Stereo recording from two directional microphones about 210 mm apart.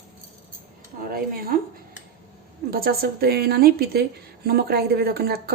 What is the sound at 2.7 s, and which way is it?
A woman's voice, 45° right (ahead or behind).